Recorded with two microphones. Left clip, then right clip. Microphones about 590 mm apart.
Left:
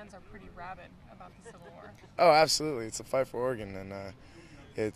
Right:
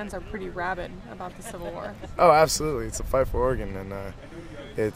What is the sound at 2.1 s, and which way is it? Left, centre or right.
Speech, left.